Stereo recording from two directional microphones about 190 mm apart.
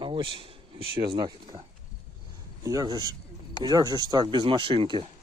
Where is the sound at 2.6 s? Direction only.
20° right (ahead or behind).